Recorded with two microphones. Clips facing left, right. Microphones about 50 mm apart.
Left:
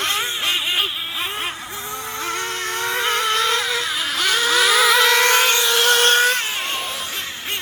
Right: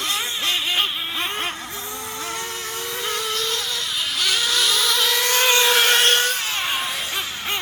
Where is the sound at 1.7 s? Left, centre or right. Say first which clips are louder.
Left 3 dB; left.